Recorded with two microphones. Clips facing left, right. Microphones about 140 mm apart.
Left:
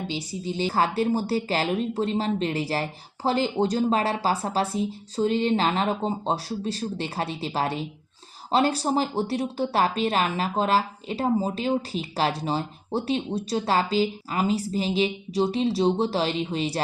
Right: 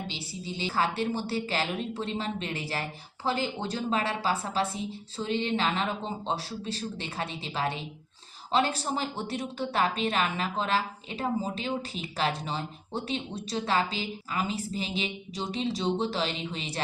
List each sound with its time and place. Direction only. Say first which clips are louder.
0.4 s a woman's voice: left 5 dB; 45° left (ahead or behind)